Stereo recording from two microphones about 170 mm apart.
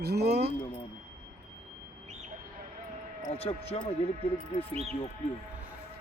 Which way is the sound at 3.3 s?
35° left (ahead or behind).